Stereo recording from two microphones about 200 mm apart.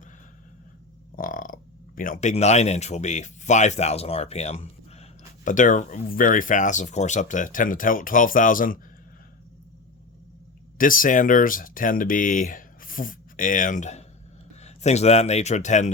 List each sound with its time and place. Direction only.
1.1 s burping: 45° left (ahead or behind)
2.0 s speech: 45° left (ahead or behind)
10.8 s speech: 45° left (ahead or behind)